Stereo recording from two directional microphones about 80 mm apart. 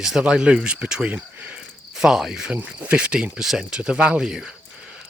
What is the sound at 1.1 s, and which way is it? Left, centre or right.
Cricket, centre.